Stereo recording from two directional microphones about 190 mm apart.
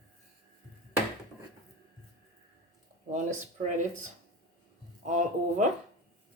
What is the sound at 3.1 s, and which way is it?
Speech, 40° right (ahead or behind).